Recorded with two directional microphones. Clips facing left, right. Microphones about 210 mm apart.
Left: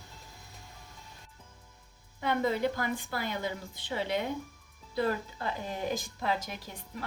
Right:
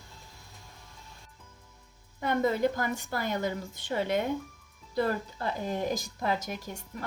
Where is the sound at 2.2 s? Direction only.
45° right (ahead or behind).